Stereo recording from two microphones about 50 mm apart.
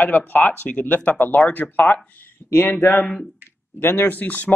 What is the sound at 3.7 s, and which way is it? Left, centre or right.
Speech, left.